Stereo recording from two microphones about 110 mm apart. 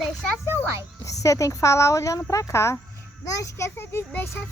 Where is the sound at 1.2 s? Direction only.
30° left (ahead or behind).